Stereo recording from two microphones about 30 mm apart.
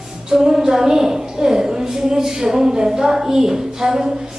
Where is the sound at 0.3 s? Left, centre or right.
Right.